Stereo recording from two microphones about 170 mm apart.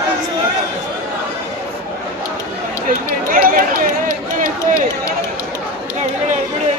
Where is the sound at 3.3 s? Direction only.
55° right (ahead or behind).